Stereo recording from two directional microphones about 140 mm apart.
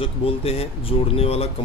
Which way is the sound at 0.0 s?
45° left (ahead or behind).